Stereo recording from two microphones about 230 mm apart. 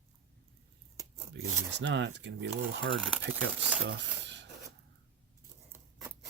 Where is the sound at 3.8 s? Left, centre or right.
Right.